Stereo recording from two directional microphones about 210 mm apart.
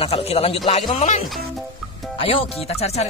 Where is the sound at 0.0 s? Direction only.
30° left (ahead or behind).